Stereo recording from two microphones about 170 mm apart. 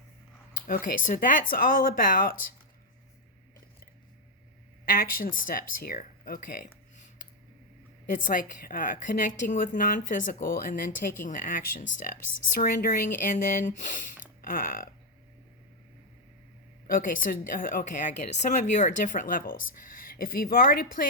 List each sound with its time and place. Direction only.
0.5 s speech: 55° left (ahead or behind)
4.9 s speech: 55° left (ahead or behind)
8.1 s a woman's voice: 50° left (ahead or behind)
16.8 s a woman's voice: 55° left (ahead or behind)